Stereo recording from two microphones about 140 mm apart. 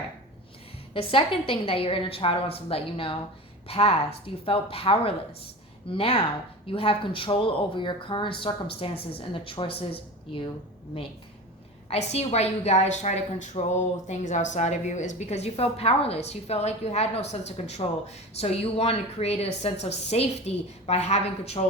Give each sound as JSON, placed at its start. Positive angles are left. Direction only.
{"t": 0.9, "sound": "a woman's voice", "side_deg": 40}
{"t": 11.9, "sound": "a woman's voice", "side_deg": 50}